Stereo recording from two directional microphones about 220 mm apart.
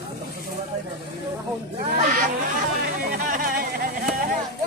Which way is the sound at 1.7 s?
40° right (ahead or behind).